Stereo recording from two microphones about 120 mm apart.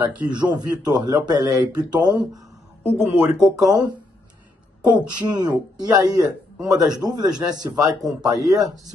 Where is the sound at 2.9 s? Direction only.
20° right (ahead or behind).